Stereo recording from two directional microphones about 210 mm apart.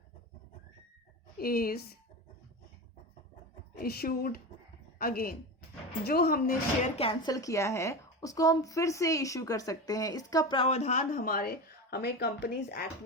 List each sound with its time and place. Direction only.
1.4 s a woman's voice: 45° left (ahead or behind)
3.8 s a woman's voice: 45° left (ahead or behind)